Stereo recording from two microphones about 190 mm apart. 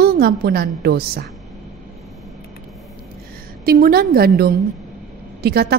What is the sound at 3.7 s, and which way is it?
A woman's voice, 50° right (ahead or behind).